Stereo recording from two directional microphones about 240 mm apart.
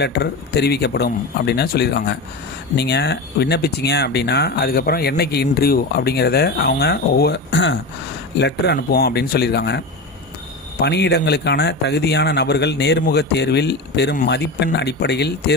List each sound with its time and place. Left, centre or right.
0.0 s speech: left